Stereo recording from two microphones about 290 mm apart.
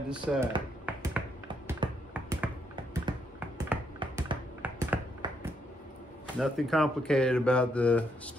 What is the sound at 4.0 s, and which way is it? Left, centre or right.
Computer keyboard, centre.